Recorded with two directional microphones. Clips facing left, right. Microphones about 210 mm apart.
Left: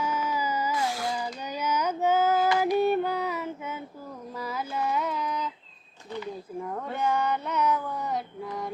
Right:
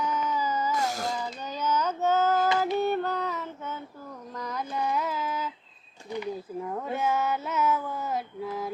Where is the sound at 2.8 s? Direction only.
10° left (ahead or behind).